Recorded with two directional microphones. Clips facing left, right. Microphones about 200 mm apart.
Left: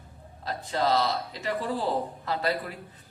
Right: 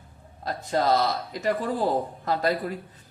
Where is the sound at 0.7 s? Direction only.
45° right (ahead or behind).